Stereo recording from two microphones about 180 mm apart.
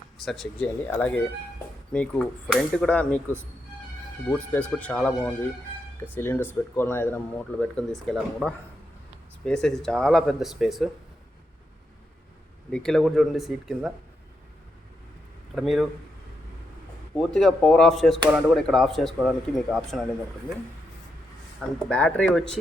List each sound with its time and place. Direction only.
0.3 s speech: centre (ahead or behind)
12.7 s speech: 5° left (ahead or behind)
15.5 s speech: centre (ahead or behind)
17.2 s speech: centre (ahead or behind)
21.8 s speech: 5° left (ahead or behind)